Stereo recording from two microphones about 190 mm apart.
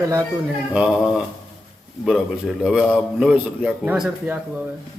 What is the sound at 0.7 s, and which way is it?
A man's voice, 5° right (ahead or behind).